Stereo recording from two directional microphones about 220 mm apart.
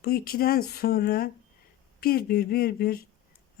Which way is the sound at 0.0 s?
45° left (ahead or behind).